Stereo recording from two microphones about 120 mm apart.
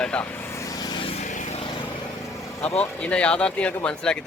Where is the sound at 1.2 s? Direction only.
90° left.